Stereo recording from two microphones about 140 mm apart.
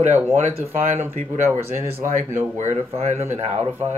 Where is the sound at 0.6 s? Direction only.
45° right (ahead or behind).